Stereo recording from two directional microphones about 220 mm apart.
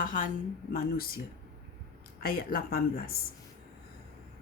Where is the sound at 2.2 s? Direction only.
40° left (ahead or behind).